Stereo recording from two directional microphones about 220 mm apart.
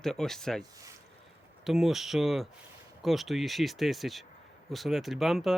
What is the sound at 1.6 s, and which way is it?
Speech, centre (ahead or behind).